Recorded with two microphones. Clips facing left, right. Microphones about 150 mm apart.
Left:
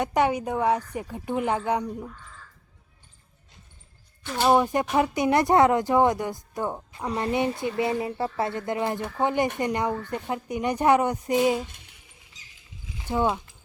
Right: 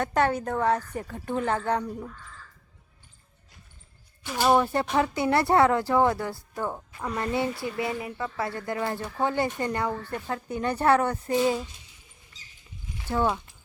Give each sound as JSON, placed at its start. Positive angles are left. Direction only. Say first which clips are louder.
{"t": 0.0, "sound": "speech", "louder": "left 1 dB", "side_deg": 15}
{"t": 4.4, "sound": "speech", "louder": "left 1 dB", "side_deg": 15}
{"t": 13.0, "sound": "speech", "louder": "left 1 dB", "side_deg": 20}